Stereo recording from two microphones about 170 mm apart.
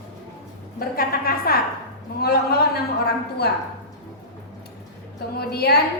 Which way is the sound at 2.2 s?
70° left (ahead or behind).